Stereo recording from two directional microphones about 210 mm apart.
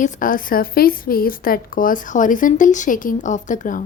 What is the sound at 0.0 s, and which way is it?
A woman's voice, 40° left (ahead or behind).